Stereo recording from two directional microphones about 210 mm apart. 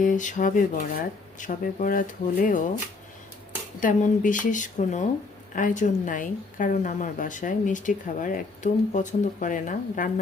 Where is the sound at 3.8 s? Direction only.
40° left (ahead or behind).